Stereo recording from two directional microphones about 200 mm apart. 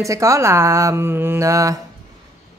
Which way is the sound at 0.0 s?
15° right (ahead or behind).